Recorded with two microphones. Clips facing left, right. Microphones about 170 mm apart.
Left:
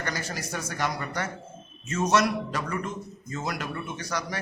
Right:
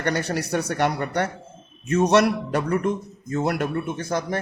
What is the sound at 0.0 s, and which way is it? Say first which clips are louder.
A man's voice: right 9 dB; 65° right (ahead or behind).